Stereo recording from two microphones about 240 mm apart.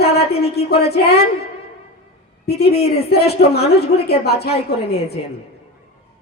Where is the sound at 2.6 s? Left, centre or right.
Left.